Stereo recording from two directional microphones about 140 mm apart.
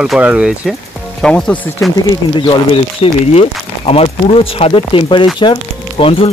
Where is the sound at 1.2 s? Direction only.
5° left (ahead or behind).